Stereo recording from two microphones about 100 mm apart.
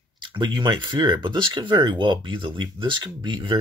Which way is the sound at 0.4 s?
50° right (ahead or behind).